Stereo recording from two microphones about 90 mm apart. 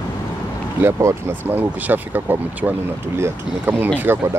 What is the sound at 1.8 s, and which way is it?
Speech, 20° right (ahead or behind).